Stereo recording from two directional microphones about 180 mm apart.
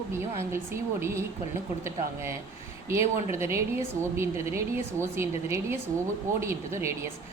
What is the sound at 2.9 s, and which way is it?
A woman's voice, 15° right (ahead or behind).